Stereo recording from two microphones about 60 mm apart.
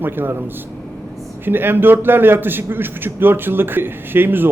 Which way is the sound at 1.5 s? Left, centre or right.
Right.